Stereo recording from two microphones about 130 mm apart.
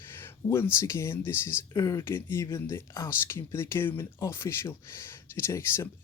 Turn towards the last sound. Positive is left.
turn(degrees=20)  # may be behind; listen again after turning